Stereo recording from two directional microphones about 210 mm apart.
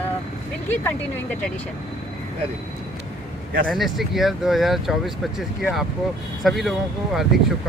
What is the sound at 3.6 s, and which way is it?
Speech, centre (ahead or behind).